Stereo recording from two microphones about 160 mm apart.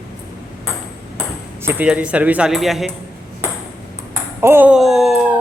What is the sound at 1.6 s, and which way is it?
Speech, 10° right (ahead or behind).